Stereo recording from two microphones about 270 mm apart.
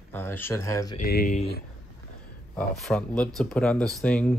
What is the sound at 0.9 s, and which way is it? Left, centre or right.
Speech, left.